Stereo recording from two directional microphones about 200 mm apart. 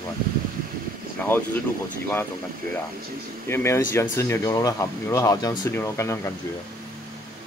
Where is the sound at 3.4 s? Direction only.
15° left (ahead or behind).